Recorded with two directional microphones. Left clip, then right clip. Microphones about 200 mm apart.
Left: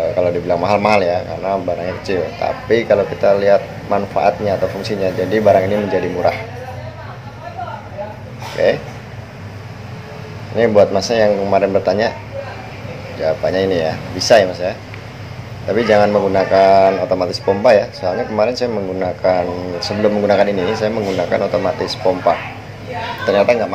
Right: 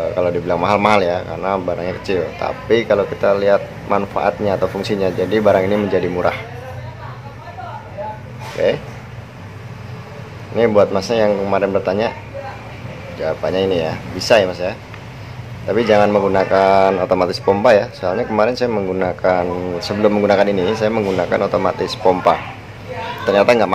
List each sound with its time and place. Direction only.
0.2 s speech: 10° right (ahead or behind)
8.6 s speech: 5° right (ahead or behind)
10.6 s speech: 5° right (ahead or behind)
13.2 s speech: 5° right (ahead or behind)
23.4 s speech: 20° right (ahead or behind)